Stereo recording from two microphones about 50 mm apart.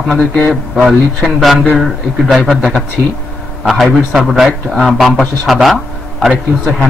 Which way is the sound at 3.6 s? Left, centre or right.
Centre.